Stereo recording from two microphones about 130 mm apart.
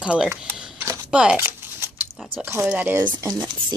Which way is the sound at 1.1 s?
10° right (ahead or behind).